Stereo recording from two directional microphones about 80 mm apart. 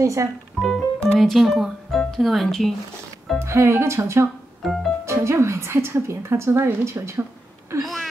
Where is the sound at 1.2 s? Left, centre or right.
Centre.